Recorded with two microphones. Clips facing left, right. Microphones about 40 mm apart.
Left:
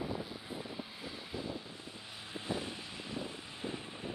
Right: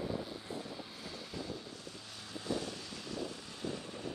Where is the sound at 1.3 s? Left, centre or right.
Left.